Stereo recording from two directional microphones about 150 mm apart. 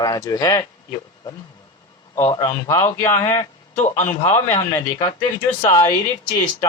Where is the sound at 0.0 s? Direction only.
25° left (ahead or behind).